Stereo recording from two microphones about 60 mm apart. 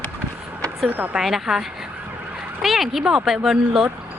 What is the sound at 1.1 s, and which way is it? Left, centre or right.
Speech, centre.